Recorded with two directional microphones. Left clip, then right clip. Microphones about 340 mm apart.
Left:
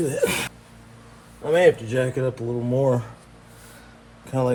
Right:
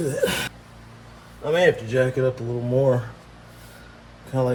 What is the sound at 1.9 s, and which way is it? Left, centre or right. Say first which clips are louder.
Speech: right 3 dB; left.